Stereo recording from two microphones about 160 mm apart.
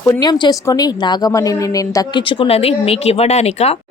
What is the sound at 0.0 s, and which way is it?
A woman's voice, 25° left (ahead or behind).